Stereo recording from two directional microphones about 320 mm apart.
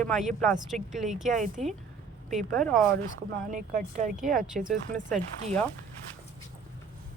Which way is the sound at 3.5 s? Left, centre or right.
Right.